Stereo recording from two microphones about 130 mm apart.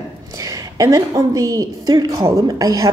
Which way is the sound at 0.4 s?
25° right (ahead or behind).